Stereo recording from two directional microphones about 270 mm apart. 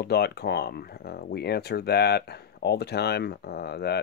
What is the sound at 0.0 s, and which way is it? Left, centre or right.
Speech, left.